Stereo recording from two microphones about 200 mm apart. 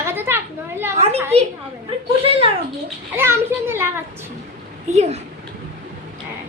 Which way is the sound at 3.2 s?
10° right (ahead or behind).